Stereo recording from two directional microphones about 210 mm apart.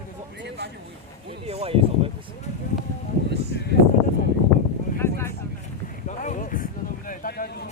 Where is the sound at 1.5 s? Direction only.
30° right (ahead or behind).